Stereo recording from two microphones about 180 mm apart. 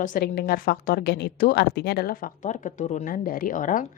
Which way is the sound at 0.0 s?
50° left (ahead or behind).